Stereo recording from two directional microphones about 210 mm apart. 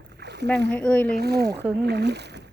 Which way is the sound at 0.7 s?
5° left (ahead or behind).